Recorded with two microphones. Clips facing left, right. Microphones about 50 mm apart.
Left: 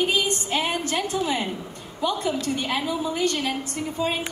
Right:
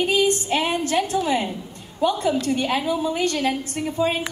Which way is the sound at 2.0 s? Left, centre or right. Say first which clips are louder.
Right 4 dB; right.